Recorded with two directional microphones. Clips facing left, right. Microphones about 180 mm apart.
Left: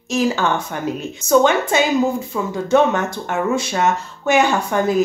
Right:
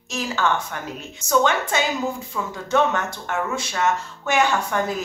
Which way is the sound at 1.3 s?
10° left (ahead or behind).